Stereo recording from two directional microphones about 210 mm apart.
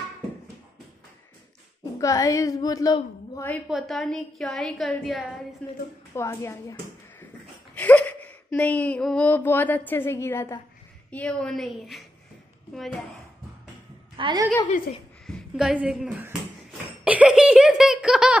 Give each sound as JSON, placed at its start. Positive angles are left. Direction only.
{"t": 2.0, "sound": "a woman's voice", "side_deg": 15}
{"t": 3.6, "sound": "a woman's voice", "side_deg": 0}
{"t": 14.1, "sound": "a woman's voice", "side_deg": -20}
{"t": 15.2, "sound": "speech", "side_deg": 0}